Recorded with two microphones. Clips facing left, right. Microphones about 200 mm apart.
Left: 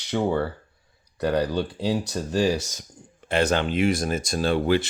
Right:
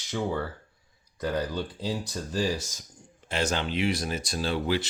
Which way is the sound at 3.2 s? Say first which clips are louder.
Left 6 dB; 55° left (ahead or behind).